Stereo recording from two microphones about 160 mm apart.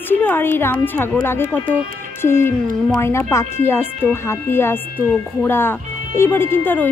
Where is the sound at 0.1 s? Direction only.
10° left (ahead or behind).